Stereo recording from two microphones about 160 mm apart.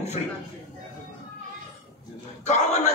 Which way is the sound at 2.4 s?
45° left (ahead or behind).